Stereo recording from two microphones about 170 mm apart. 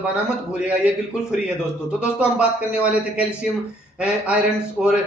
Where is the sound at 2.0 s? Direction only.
5° right (ahead or behind).